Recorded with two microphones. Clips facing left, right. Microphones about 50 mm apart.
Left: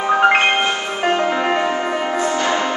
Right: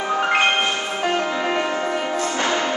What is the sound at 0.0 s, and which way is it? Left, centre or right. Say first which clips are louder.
Music: left 5 dB; left.